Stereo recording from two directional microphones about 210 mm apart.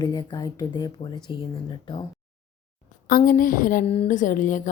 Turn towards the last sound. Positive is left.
turn(degrees=35)  # may be behind; listen again after turning